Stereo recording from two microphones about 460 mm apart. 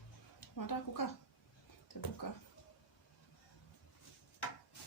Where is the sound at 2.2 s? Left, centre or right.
Left.